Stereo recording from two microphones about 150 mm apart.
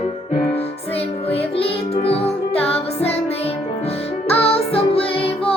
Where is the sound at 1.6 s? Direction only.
40° left (ahead or behind).